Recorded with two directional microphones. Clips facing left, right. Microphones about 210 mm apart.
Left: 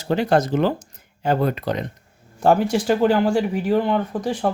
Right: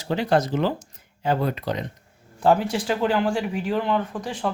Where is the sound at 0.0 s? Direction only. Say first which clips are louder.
Left 3 dB; 50° left (ahead or behind).